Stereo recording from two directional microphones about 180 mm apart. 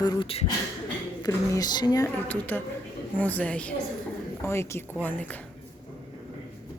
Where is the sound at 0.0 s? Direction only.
25° left (ahead or behind).